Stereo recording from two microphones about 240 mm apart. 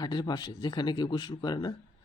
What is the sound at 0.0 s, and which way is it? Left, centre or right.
Speech, centre.